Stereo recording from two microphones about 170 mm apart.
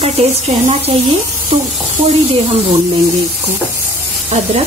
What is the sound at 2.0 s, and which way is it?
Speech, 40° right (ahead or behind).